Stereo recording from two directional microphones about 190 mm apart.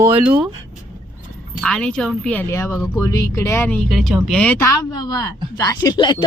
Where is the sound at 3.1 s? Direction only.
15° left (ahead or behind).